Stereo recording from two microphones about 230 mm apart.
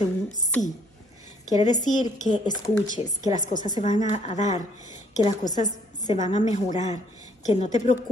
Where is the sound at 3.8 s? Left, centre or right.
Left.